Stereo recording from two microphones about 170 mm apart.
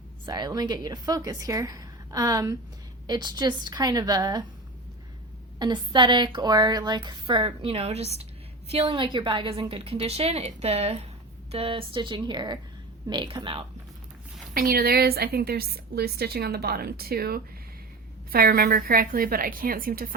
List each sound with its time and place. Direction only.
0.3 s a woman's voice: 25° right (ahead or behind)
5.5 s a woman's voice: 25° right (ahead or behind)
14.5 s a woman's voice: 60° right (ahead or behind)